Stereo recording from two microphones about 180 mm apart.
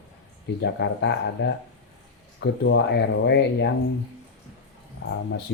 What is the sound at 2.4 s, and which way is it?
Speech, 85° left.